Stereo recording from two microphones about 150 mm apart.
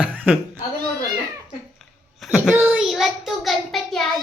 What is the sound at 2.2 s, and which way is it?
Child singing, 5° right (ahead or behind).